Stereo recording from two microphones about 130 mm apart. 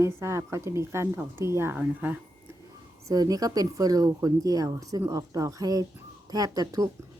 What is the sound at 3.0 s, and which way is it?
Speech, 30° right (ahead or behind).